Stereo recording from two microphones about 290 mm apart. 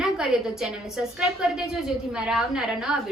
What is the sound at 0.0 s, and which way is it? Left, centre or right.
A woman's voice, centre.